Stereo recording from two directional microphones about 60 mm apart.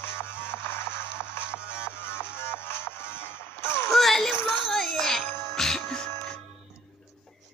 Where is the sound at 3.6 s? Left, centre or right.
Left.